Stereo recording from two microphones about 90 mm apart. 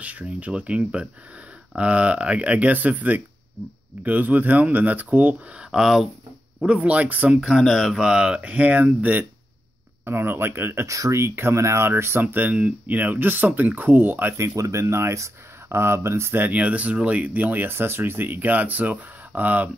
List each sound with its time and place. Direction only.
0.0 s speech: 15° right (ahead or behind)
5.7 s speech: 5° right (ahead or behind); by 14.5 s 25° right (ahead or behind)
14.5 s speech: 35° right (ahead or behind); by 19.7 s 20° right (ahead or behind)